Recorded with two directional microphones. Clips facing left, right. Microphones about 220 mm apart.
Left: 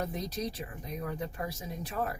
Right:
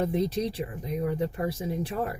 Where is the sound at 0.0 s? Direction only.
30° right (ahead or behind).